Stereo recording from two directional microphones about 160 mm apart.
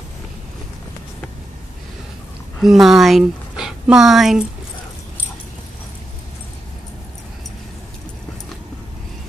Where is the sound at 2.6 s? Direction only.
Centre (ahead or behind).